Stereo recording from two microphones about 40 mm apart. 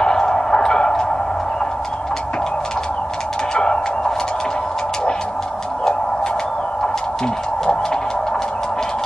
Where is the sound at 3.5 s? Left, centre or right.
Left.